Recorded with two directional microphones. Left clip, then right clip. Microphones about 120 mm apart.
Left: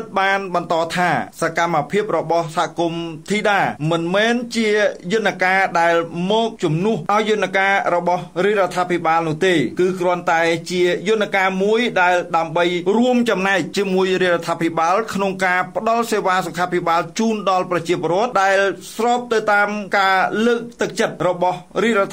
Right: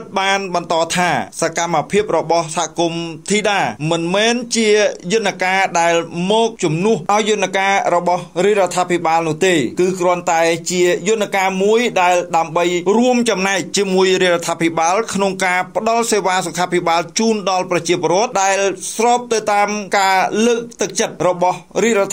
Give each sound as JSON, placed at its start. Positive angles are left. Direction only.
{"t": 0.1, "sound": "a man's voice", "side_deg": -45}
{"t": 6.1, "sound": "mantra", "side_deg": -30}
{"t": 7.1, "sound": "a man's voice", "side_deg": -35}